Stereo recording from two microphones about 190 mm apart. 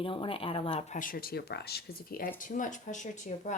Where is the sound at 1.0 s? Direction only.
50° left (ahead or behind).